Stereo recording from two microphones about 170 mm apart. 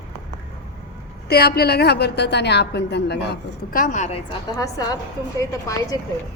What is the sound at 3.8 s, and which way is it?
Speech, 45° left (ahead or behind).